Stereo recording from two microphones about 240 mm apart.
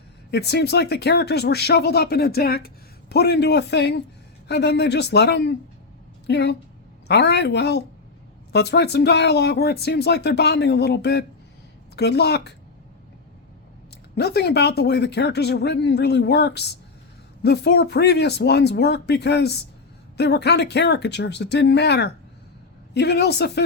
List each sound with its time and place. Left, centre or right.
0.3 s speech: left
14.2 s speech: left